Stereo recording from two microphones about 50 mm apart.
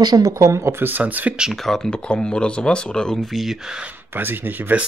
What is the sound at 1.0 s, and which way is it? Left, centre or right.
Speech, right.